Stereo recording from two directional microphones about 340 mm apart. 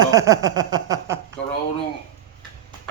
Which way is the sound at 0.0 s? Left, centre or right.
Centre.